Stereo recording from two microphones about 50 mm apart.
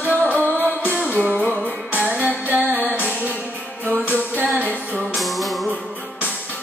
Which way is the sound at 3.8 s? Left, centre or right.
Right.